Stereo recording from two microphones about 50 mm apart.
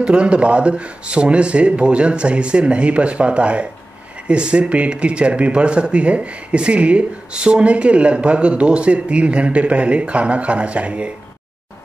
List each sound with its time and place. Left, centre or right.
0.0 s speech: right